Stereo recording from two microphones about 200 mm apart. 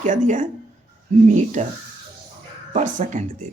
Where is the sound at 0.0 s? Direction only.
40° right (ahead or behind).